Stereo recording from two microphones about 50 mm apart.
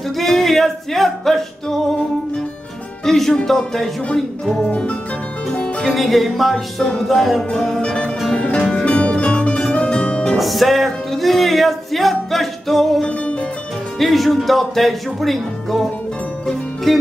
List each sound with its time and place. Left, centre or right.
0.2 s music: centre
3.1 s speech: centre
4.6 s music: left
5.9 s speech: centre
6.5 s speech: centre
7.1 s speech: centre
7.8 s music: centre
10.3 s music: centre
13.9 s speech: centre
16.4 s music: centre